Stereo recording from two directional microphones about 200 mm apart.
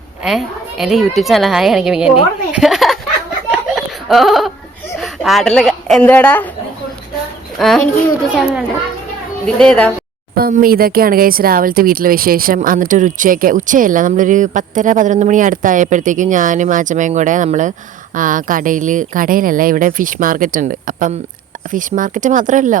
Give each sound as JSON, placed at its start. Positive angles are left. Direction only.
{"t": 0.2, "sound": "a woman's voice", "side_deg": 0}
{"t": 3.5, "sound": "a sound", "side_deg": 0}
{"t": 4.9, "sound": "speech", "side_deg": 0}
{"t": 7.6, "sound": "a woman's voice", "side_deg": 0}
{"t": 9.6, "sound": "a woman's voice", "side_deg": 5}
{"t": 10.3, "sound": "speech", "side_deg": -45}